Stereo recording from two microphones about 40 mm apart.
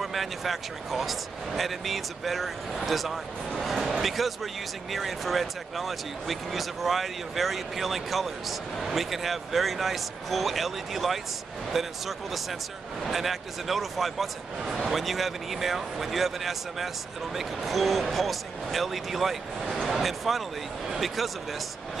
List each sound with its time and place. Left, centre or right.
0.0 s speech: centre